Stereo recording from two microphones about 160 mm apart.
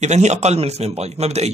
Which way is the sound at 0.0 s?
45° right (ahead or behind).